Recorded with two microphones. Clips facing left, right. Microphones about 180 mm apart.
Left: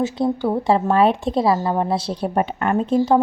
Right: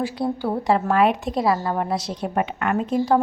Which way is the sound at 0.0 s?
20° left (ahead or behind).